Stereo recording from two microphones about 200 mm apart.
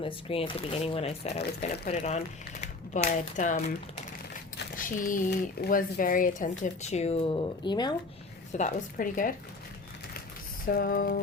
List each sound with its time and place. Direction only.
0.0 s speech: 25° left (ahead or behind)
8.5 s speech: 40° left (ahead or behind)
10.7 s a sound: 45° left (ahead or behind)